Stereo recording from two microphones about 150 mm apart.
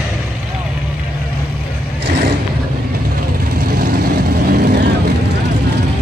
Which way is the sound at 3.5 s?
90° right.